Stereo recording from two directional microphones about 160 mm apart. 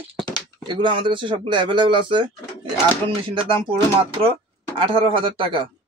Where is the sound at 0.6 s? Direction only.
30° right (ahead or behind).